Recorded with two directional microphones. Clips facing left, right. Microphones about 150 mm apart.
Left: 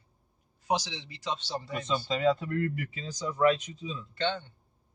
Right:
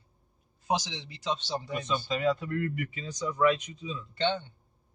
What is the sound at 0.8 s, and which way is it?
Speech, 20° right (ahead or behind).